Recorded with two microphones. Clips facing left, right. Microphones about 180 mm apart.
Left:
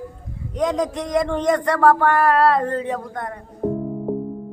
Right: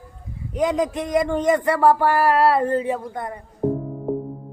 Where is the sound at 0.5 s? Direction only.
5° right (ahead or behind).